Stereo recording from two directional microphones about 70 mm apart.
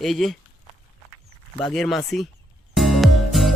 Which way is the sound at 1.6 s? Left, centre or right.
Centre.